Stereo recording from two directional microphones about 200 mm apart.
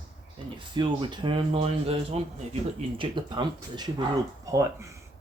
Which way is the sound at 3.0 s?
25° right (ahead or behind).